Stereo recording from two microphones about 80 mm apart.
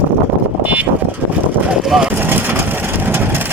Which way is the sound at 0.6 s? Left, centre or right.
Centre.